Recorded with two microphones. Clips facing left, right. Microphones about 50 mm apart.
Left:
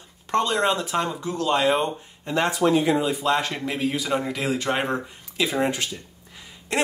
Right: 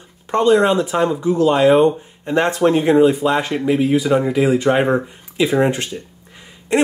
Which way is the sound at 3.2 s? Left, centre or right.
Centre.